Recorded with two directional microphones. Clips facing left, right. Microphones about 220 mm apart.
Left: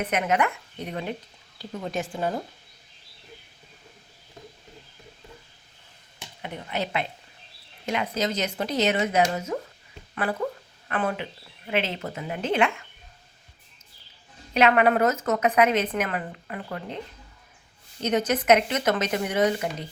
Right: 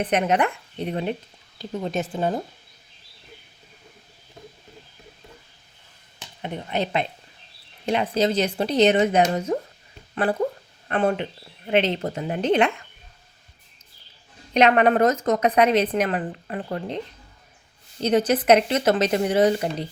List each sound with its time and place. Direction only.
0.0 s a woman's voice: 30° right (ahead or behind)
6.4 s a woman's voice: 30° right (ahead or behind)
10.2 s speech: 15° right (ahead or behind)
10.8 s a woman's voice: 30° right (ahead or behind)
14.5 s a woman's voice: 35° right (ahead or behind)
18.1 s a woman's voice: 35° right (ahead or behind)